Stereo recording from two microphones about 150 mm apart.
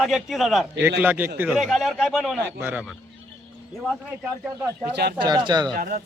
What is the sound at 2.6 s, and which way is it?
Speech, 10° right (ahead or behind).